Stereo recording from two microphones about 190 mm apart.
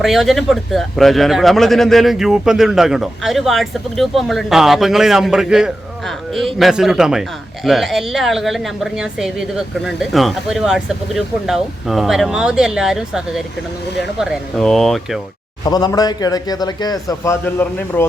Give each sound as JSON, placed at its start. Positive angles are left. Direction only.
{"t": 0.0, "sound": "a man's voice", "side_deg": 0}
{"t": 15.6, "sound": "a man's voice", "side_deg": 20}